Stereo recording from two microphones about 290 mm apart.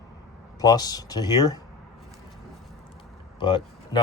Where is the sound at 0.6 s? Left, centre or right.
Centre.